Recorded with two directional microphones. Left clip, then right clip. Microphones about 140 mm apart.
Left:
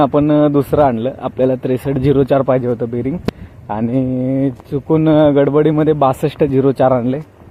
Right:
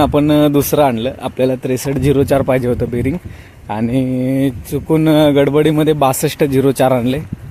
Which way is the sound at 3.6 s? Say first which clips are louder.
Even; 30° right (ahead or behind).